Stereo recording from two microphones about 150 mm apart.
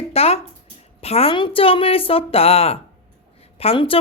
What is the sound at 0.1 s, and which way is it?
Speech, 40° left (ahead or behind).